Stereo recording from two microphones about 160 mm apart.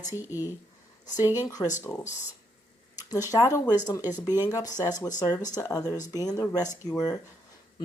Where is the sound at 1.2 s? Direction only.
15° right (ahead or behind).